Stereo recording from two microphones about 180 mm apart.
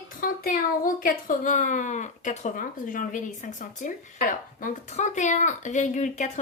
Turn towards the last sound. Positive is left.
turn(degrees=40)  # may be behind; listen again after turning